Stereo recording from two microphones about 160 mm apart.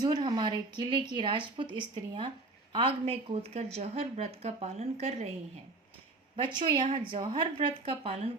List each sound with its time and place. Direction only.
0.0 s a woman's voice: 25° right (ahead or behind)
6.3 s a woman's voice: 30° right (ahead or behind)